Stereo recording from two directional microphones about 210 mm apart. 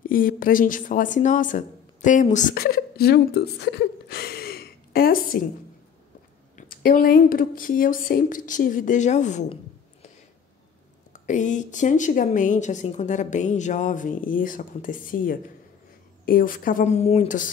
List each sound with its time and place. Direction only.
0.0 s a woman's voice: 40° left (ahead or behind)
6.5 s a woman's voice: 40° left (ahead or behind)
11.1 s a woman's voice: 35° left (ahead or behind)